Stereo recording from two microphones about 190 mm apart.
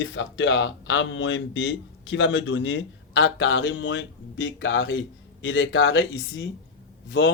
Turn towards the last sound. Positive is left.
turn(degrees=70)  # may be behind; listen again after turning